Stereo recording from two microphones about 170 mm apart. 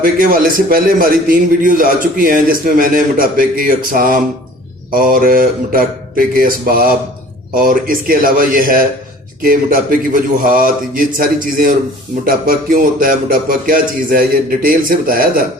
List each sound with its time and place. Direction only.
0.0 s a man's voice: 55° right (ahead or behind)